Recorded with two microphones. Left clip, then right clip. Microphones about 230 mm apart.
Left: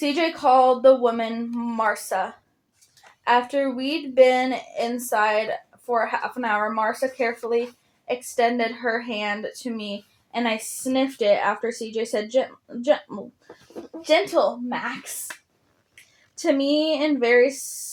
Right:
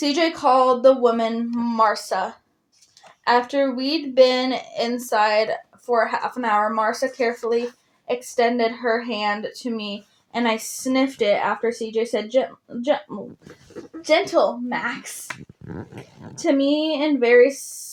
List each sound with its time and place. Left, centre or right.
0.0 s speech: right
3.2 s speech: right
16.4 s speech: right